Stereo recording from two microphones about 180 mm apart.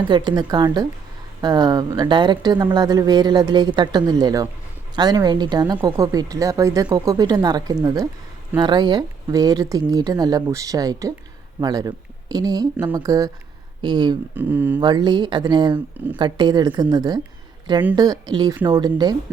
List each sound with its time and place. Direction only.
0.1 s speech: 25° right (ahead or behind)
14.3 s speech: 10° right (ahead or behind)
14.8 s speech: 25° right (ahead or behind)